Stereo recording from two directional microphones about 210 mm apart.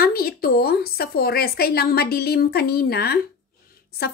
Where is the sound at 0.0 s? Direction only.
45° left (ahead or behind).